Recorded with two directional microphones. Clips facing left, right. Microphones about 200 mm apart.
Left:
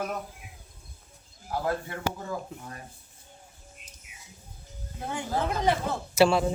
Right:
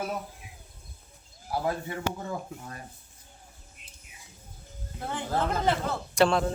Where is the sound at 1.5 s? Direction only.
10° right (ahead or behind).